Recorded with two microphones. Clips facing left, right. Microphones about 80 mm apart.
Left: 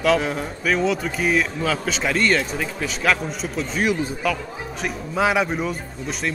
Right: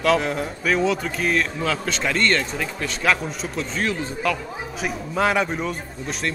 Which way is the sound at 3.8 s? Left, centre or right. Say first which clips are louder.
Left 4 dB; centre.